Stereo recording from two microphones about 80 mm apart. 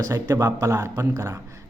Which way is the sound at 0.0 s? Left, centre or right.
Right.